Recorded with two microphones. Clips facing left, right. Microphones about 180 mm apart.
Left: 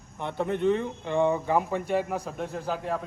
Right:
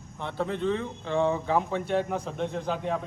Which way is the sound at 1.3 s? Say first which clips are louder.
Left 1 dB; 5° left (ahead or behind).